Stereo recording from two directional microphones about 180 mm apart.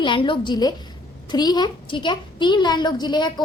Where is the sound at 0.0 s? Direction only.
25° left (ahead or behind).